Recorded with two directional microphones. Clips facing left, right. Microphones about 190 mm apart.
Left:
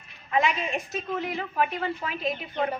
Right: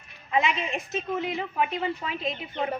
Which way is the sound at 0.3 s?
20° right (ahead or behind).